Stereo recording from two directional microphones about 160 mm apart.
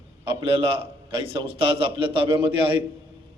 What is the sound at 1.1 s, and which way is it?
A man's voice, 30° right (ahead or behind).